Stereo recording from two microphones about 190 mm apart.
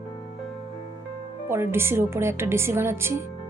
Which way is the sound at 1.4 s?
10° right (ahead or behind).